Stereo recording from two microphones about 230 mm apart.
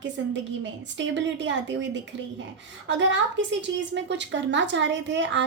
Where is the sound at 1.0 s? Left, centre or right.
Right.